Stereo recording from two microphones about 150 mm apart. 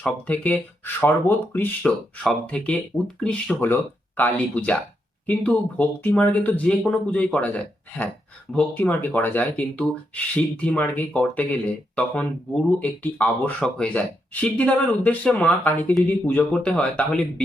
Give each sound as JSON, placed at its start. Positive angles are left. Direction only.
{"t": 0.0, "sound": "speech", "side_deg": 10}